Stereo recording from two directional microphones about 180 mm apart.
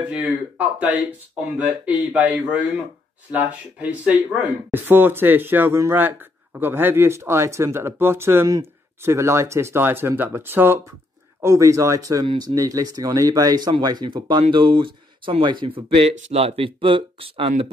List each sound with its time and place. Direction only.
0.1 s speech: 10° right (ahead or behind); by 17.6 s 35° right (ahead or behind)